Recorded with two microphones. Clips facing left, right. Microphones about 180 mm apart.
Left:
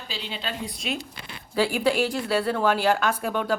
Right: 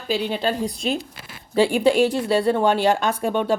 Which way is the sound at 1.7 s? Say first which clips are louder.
Right 6 dB; 25° right (ahead or behind).